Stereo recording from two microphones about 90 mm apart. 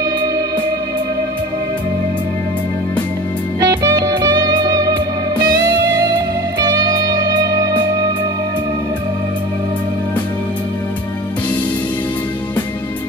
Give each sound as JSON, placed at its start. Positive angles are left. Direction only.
{"t": 3.6, "sound": "music", "side_deg": -45}
{"t": 6.6, "sound": "music", "side_deg": -45}